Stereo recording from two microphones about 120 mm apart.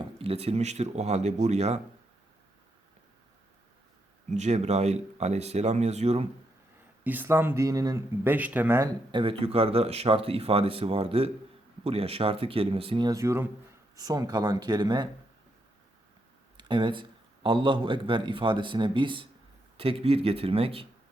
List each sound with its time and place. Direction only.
0.0 s speech: 55° right (ahead or behind)
4.3 s speech: 70° right (ahead or behind)
7.0 s speech: 15° right (ahead or behind); by 8.0 s 30° right (ahead or behind)
8.2 s speech: 15° right (ahead or behind)
9.1 s a man's voice: 50° right (ahead or behind)
13.1 s speech: 25° right (ahead or behind)
16.6 s a man's voice: 40° right (ahead or behind)